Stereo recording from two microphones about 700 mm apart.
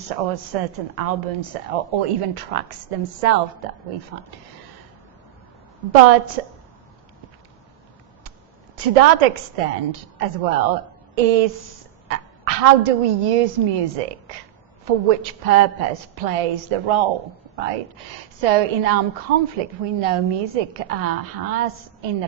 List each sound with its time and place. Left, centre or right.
0.2 s a woman's voice: right
5.9 s a woman's voice: right
8.7 s a woman's voice: right
18.4 s a woman's voice: right